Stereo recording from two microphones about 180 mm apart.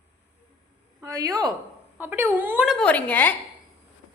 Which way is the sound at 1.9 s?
10° right (ahead or behind).